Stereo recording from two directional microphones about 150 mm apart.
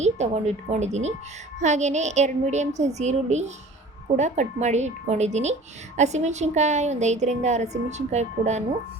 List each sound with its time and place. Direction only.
0.0 s a woman's voice: 50° right (ahead or behind)